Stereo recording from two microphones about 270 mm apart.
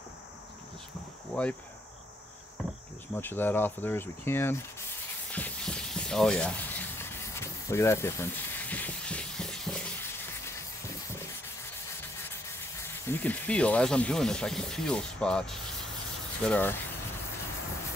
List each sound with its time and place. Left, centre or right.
1.3 s speech: centre
3.2 s rub: centre
5.3 s a sound: centre
12.0 s speech: centre
16.4 s rub: centre